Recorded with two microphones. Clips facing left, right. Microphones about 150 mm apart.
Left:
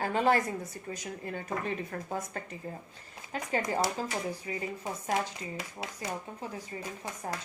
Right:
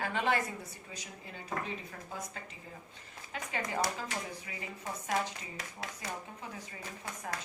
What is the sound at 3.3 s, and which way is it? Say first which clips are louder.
A woman's voice: left 5 dB; 40° left (ahead or behind).